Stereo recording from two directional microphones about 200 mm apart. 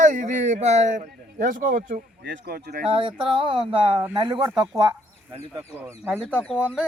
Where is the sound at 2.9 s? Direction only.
25° right (ahead or behind).